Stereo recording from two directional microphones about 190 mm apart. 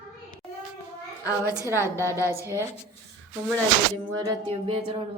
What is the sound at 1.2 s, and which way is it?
A woman's voice, 15° left (ahead or behind).